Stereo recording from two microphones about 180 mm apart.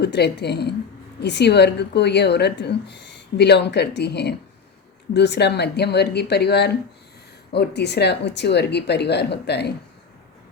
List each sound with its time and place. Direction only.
0.0 s speech: 70° left (ahead or behind)